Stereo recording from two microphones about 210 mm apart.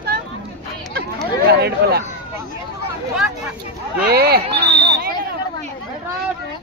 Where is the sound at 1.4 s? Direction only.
50° right (ahead or behind).